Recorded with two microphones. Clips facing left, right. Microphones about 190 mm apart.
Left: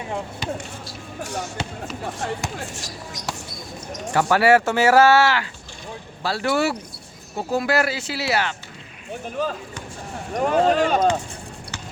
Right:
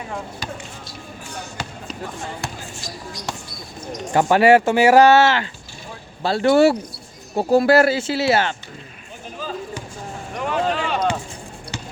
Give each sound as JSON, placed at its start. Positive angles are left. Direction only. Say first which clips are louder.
{"t": 1.2, "sound": "basketball bounce", "louder": "left 7 dB", "side_deg": 80}
{"t": 2.1, "sound": "speech", "louder": "left 3 dB", "side_deg": 90}
{"t": 4.1, "sound": "speech", "louder": "right 3 dB", "side_deg": -20}
{"t": 9.4, "sound": "speech", "louder": "left 6 dB", "side_deg": 65}
{"t": 10.3, "sound": "speech", "louder": "left 4 dB", "side_deg": 40}